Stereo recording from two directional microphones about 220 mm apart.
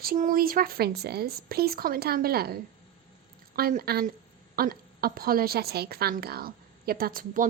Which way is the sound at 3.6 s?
40° right (ahead or behind).